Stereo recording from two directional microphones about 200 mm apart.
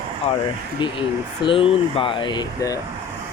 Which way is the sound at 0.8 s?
25° left (ahead or behind).